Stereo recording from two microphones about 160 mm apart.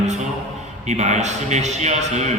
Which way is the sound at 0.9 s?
45° right (ahead or behind).